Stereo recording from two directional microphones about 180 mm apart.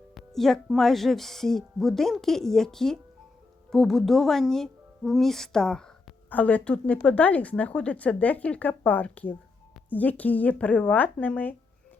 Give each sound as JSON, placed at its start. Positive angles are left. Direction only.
{"t": 0.1, "sound": "speech", "side_deg": 0}